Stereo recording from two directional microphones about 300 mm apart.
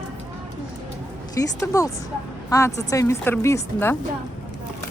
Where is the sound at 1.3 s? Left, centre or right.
Centre.